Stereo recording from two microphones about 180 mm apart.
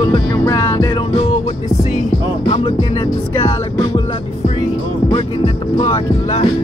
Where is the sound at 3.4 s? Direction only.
30° left (ahead or behind).